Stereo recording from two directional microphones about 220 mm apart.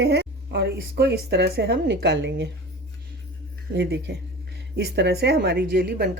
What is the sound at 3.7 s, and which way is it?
Speech, 50° right (ahead or behind).